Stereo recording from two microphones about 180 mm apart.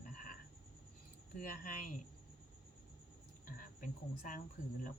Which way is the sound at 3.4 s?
50° left (ahead or behind).